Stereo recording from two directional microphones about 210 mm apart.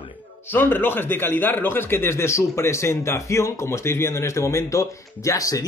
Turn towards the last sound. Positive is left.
turn(degrees=15)  # may be behind; listen again after turning